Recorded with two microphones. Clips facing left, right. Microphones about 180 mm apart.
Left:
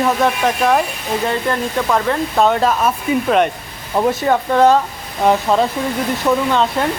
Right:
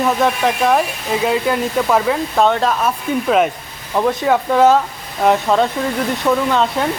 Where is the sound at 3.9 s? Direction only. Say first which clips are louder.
Left 1 dB; 10° left (ahead or behind).